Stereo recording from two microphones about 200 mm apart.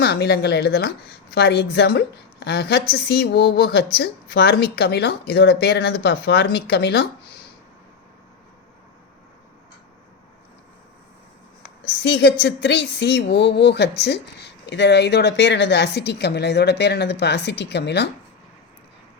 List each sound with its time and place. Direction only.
0.0 s a woman's voice: 55° left (ahead or behind)
12.0 s speech: 55° left (ahead or behind)